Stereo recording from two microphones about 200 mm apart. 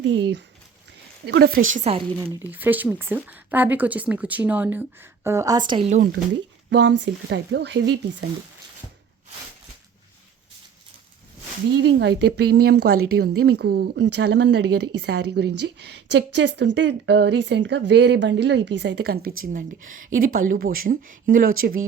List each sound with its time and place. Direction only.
0.0 s speech: 60° right (ahead or behind)
1.8 s speech: 30° right (ahead or behind)
2.1 s speech: 10° right (ahead or behind)
5.9 s speech: 45° right (ahead or behind)
6.7 s speech: 65° right (ahead or behind)
11.8 s speech: 60° right (ahead or behind)